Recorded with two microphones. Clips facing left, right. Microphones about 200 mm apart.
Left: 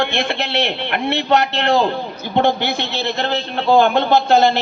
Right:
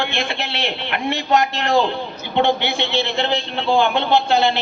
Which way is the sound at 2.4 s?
40° left (ahead or behind).